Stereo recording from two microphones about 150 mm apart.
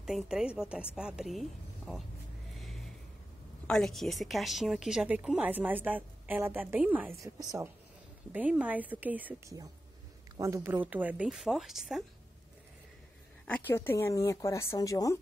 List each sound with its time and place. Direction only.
0.0 s a woman's voice: 5° right (ahead or behind)
2.5 s a sound: centre (ahead or behind)
3.6 s a woman's voice: 5° left (ahead or behind)
10.3 s a woman's voice: 20° right (ahead or behind); by 12.0 s 5° right (ahead or behind)
13.5 s speech: 15° left (ahead or behind)